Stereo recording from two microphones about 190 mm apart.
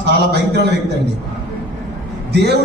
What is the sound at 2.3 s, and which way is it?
Speech, 60° right (ahead or behind).